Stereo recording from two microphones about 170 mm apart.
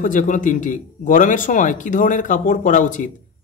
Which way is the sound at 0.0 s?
50° left (ahead or behind).